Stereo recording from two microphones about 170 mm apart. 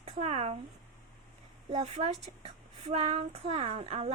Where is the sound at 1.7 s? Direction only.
40° right (ahead or behind).